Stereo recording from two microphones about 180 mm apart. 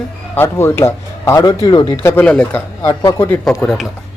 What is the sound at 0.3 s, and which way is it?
Speech, 15° left (ahead or behind).